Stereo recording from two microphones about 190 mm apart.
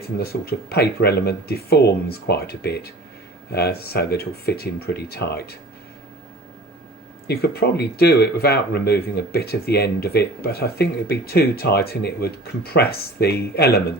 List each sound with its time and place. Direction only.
0.2 s speech: 55° left (ahead or behind)
7.3 s speech: 55° left (ahead or behind)